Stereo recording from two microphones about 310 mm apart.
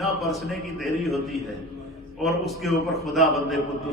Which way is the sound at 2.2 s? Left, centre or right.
Centre.